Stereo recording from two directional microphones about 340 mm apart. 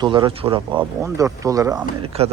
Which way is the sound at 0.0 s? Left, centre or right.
Centre.